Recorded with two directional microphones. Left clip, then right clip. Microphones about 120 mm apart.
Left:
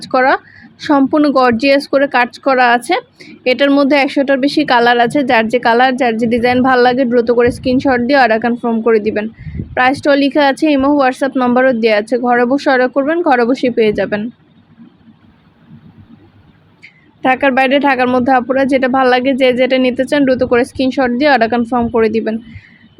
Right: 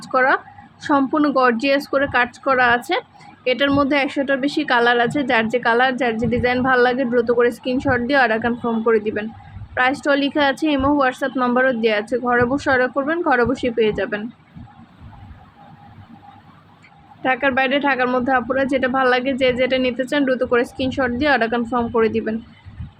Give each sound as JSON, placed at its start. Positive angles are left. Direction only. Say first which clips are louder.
{"t": 0.0, "sound": "a woman's voice", "louder": "left 5 dB", "side_deg": 35}
{"t": 17.2, "sound": "a woman's voice", "louder": "left 7 dB", "side_deg": 40}